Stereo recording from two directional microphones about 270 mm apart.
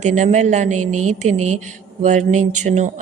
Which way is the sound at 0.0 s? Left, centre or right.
Right.